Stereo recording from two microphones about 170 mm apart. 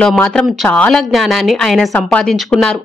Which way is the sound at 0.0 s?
5° left (ahead or behind).